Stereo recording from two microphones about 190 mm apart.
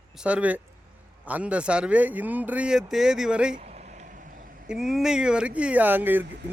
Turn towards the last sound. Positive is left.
turn(degrees=-10)  # may be behind; listen again after turning